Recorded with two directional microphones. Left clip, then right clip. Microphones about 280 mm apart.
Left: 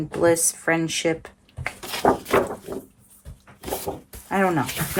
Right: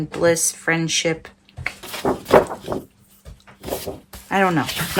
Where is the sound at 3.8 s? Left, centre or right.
Centre.